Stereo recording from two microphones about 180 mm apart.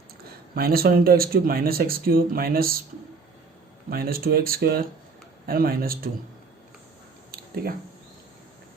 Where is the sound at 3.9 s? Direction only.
55° right (ahead or behind).